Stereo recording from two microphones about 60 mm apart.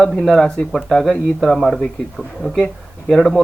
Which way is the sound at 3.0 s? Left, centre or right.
Centre.